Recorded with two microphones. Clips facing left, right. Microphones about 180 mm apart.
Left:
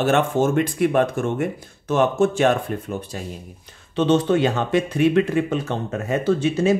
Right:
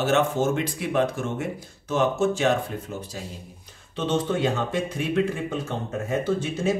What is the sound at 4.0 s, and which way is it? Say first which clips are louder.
Speech: left 7 dB; 75° left (ahead or behind).